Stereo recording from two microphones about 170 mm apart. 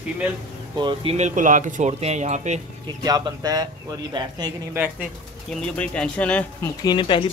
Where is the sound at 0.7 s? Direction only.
30° right (ahead or behind).